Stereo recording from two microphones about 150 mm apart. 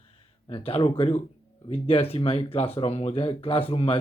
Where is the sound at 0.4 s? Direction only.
40° left (ahead or behind).